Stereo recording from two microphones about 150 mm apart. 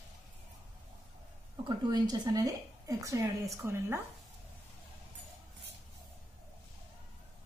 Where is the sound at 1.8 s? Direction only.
25° right (ahead or behind).